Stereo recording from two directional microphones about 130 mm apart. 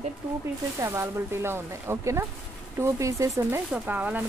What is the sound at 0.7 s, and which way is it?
Speech, 20° right (ahead or behind).